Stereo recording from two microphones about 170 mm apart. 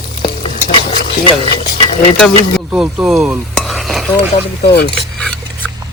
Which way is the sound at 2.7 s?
5° right (ahead or behind).